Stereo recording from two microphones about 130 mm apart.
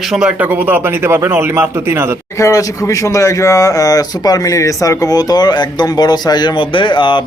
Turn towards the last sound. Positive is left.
turn(degrees=35)  # may be behind; listen again after turning